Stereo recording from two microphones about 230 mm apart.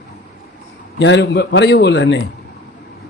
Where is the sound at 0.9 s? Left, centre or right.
Left.